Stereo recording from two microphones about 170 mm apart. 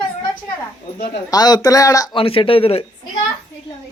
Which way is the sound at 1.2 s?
25° left (ahead or behind).